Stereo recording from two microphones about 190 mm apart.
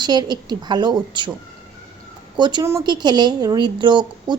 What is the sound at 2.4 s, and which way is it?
Speech, 25° right (ahead or behind).